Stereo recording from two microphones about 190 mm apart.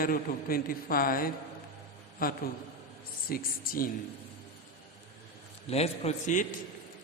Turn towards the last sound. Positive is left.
turn(degrees=40)  # may be behind; listen again after turning